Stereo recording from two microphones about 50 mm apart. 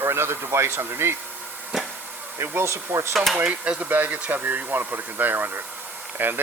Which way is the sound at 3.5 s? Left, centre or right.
Right.